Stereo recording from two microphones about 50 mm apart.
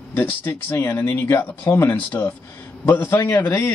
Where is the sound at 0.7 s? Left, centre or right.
Left.